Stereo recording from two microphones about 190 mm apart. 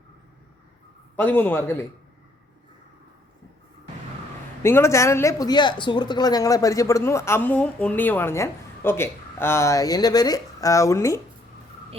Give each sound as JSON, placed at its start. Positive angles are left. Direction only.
{"t": 1.1, "sound": "speech", "side_deg": 10}
{"t": 4.6, "sound": "speech", "side_deg": 15}